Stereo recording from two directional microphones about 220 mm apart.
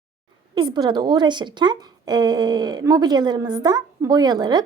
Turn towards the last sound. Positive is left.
turn(degrees=-20)  # may be behind; listen again after turning